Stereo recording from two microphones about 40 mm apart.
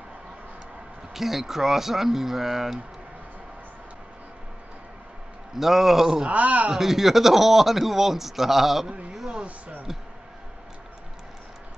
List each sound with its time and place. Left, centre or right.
1.1 s speech: centre
5.6 s speech: centre
6.2 s speech: right
6.7 s speech: centre